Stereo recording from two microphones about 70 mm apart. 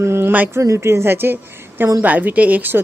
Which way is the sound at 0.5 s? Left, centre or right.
Right.